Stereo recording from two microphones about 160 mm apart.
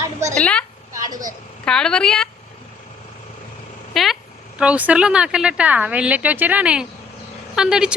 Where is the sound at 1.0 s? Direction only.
25° right (ahead or behind).